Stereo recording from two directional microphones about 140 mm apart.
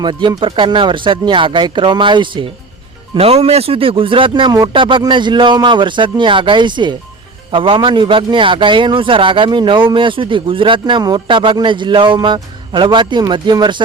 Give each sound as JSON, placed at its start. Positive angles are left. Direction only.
{"t": 0.0, "sound": "a man's voice", "side_deg": -35}